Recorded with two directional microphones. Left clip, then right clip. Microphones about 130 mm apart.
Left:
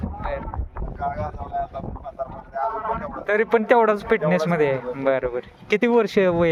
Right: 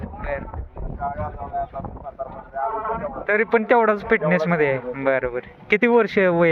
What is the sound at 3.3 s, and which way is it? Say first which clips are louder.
A man's voice: even; 30° left (ahead or behind).